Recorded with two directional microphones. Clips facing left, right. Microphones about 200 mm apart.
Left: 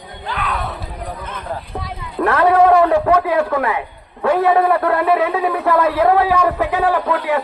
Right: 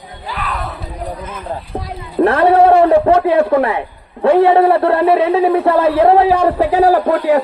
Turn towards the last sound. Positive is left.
turn(degrees=-40)  # may be behind; listen again after turning